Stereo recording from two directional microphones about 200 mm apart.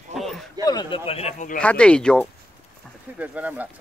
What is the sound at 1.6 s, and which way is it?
Speech, 5° left (ahead or behind).